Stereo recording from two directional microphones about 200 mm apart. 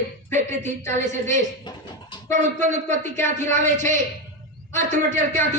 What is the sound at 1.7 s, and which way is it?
Speech, 20° left (ahead or behind).